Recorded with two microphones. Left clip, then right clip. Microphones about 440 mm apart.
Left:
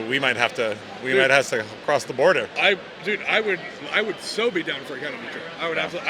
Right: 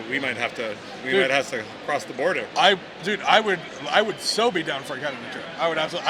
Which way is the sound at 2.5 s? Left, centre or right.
Right.